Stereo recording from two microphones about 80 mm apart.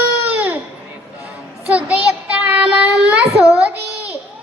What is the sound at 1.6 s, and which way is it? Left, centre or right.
Child singing, centre.